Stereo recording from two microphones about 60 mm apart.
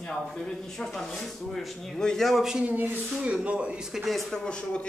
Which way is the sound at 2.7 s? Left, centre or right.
Right.